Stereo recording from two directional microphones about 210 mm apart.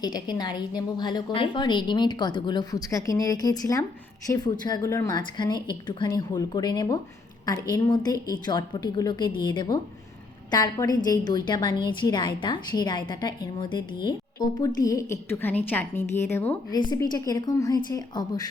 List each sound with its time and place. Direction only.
0.0 s a woman's voice: 20° left (ahead or behind)
16.7 s a woman's voice: 20° left (ahead or behind)